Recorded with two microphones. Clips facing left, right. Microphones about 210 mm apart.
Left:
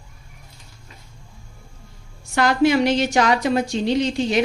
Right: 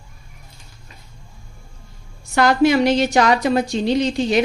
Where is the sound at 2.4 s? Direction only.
40° right (ahead or behind).